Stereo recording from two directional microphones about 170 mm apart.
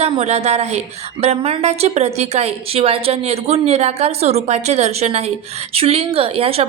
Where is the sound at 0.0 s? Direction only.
35° right (ahead or behind).